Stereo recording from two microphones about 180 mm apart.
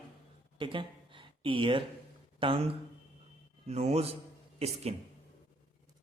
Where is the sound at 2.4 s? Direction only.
30° right (ahead or behind).